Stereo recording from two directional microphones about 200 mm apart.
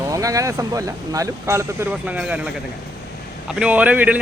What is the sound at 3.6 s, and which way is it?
Speech, 5° right (ahead or behind).